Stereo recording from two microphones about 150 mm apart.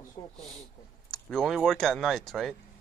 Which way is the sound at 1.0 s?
5° left (ahead or behind).